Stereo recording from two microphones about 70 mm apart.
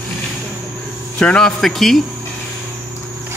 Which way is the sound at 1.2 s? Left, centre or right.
Centre.